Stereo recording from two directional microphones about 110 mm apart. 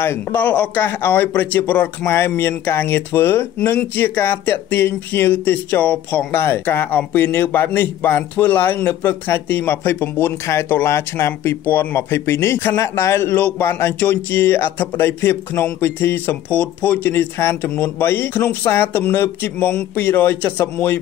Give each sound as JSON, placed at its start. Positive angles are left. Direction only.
{"t": 0.0, "sound": "speech", "side_deg": 20}